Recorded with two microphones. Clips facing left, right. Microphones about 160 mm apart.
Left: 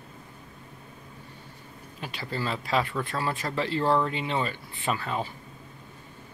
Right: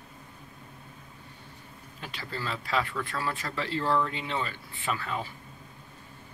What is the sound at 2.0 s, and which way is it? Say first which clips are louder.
Speech: left 4 dB; 15° left (ahead or behind).